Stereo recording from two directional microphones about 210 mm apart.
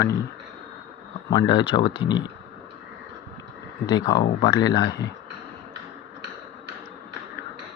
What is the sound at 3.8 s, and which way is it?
Speech, 20° left (ahead or behind).